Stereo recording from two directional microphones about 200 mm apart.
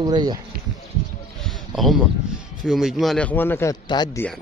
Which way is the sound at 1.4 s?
Centre (ahead or behind).